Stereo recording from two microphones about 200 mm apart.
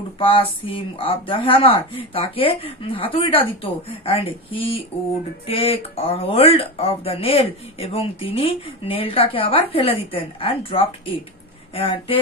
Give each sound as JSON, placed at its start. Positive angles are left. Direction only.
{"t": 0.2, "sound": "speech", "side_deg": 25}